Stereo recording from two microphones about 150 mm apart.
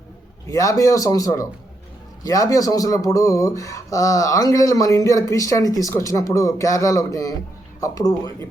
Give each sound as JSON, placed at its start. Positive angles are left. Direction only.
{"t": 0.4, "sound": "speech", "side_deg": 20}